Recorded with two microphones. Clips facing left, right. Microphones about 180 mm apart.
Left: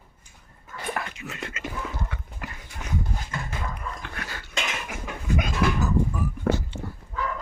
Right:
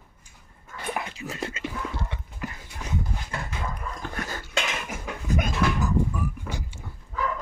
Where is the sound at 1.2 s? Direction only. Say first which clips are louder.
Right 3 dB; 35° right (ahead or behind).